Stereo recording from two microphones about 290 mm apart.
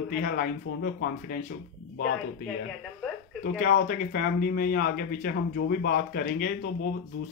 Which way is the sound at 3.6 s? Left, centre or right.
Left.